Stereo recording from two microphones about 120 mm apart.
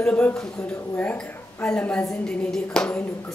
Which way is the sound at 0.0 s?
10° left (ahead or behind).